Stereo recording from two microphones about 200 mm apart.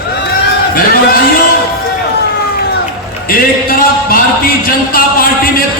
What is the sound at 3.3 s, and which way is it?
Speech, 45° left (ahead or behind).